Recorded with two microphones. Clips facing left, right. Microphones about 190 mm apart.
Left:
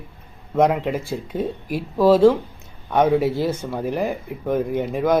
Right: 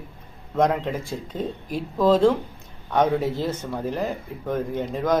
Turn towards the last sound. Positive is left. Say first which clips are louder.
# left 3 dB
turn(degrees=10)  # may be behind; listen again after turning